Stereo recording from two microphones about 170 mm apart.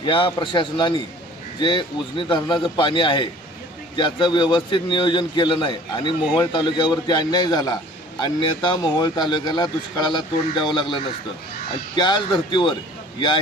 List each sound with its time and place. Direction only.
0.0 s speech: 30° left (ahead or behind)